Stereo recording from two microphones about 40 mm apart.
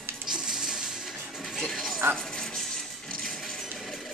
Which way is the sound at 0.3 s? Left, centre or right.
Centre.